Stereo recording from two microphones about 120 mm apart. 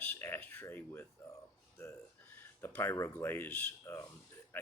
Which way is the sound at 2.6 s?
20° left (ahead or behind).